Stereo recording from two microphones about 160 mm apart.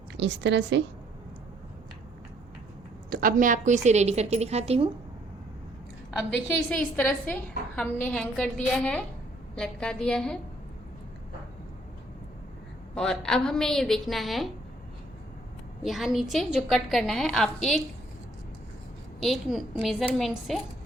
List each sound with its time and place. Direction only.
0.2 s a woman's voice: 90° right
3.1 s a woman's voice: 60° right (ahead or behind); by 4.9 s 40° right (ahead or behind)
6.7 s a woman's voice: 5° left (ahead or behind)
12.9 s a woman's voice: 5° left (ahead or behind)
15.8 s a woman's voice: centre (ahead or behind)
19.2 s a woman's voice: centre (ahead or behind)